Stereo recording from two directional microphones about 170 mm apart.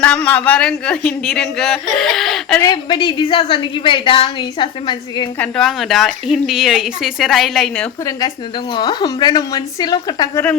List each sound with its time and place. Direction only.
0.0 s speech: 5° left (ahead or behind)
2.6 s a woman's voice: 25° left (ahead or behind)
5.4 s speech: centre (ahead or behind)
8.7 s a woman's voice: 25° left (ahead or behind)